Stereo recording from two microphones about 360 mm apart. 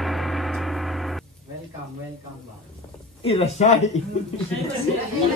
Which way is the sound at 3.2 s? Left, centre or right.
Centre.